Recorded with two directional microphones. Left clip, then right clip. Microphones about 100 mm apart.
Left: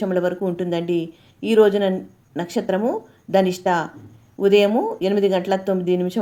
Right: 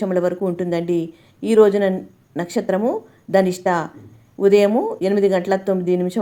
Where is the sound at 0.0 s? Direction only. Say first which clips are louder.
Right 2 dB; 30° right (ahead or behind).